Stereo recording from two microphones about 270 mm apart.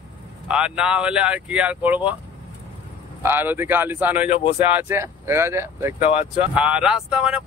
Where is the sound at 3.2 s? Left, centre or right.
Centre.